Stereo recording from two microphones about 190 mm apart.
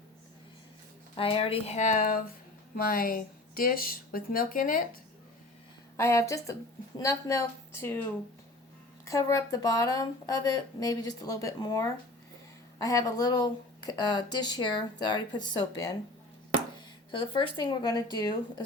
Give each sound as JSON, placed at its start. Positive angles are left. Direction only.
{"t": 1.1, "sound": "speech", "side_deg": 30}
{"t": 6.0, "sound": "speech", "side_deg": 15}
{"t": 9.0, "sound": "speech", "side_deg": 20}